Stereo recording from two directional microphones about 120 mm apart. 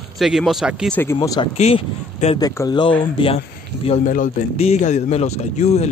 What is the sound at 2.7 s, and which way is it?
Speech, 40° left (ahead or behind).